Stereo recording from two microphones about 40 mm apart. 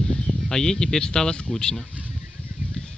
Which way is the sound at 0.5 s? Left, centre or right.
Centre.